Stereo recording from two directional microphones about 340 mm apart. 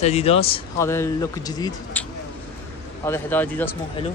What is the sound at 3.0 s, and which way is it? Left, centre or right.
Speech, centre.